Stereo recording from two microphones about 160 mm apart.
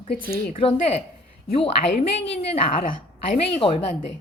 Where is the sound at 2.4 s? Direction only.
35° left (ahead or behind).